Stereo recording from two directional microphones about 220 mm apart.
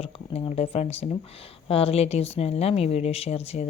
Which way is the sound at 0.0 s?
25° left (ahead or behind).